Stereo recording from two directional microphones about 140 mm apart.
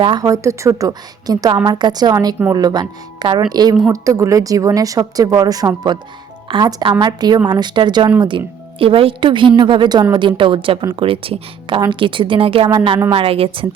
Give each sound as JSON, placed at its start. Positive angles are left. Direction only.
{"t": 0.0, "sound": "speech", "side_deg": -30}